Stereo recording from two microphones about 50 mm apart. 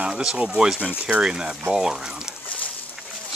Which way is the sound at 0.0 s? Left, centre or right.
Centre.